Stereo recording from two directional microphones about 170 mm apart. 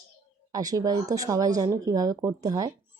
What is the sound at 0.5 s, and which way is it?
Speech, 20° right (ahead or behind).